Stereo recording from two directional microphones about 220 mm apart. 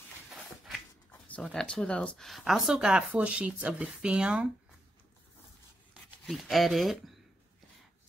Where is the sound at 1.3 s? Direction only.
5° left (ahead or behind).